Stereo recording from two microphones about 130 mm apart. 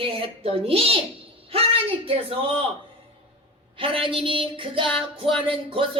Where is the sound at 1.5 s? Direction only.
45° right (ahead or behind).